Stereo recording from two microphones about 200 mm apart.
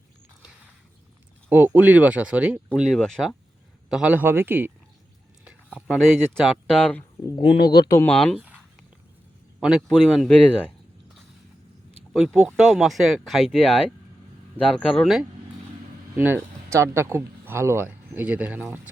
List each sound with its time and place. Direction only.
1.5 s speech: 10° right (ahead or behind)
7.7 s speech: 20° left (ahead or behind)
8.1 s speech: 5° left (ahead or behind)
9.6 s speech: centre (ahead or behind)
12.1 s speech: centre (ahead or behind)